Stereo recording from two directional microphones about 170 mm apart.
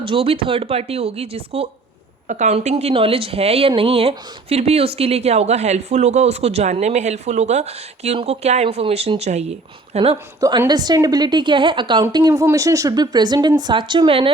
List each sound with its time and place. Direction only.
0.0 s speech: 30° right (ahead or behind)
2.2 s a woman's voice: 45° right (ahead or behind)
10.4 s a woman's voice: 20° right (ahead or behind)